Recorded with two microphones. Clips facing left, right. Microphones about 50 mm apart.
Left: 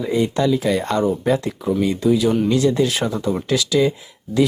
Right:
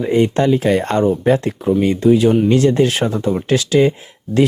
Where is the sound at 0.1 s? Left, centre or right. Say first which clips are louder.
Right 4 dB; right.